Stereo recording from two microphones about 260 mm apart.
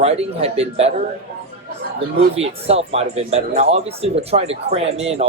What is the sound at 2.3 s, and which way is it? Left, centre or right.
Speech, right.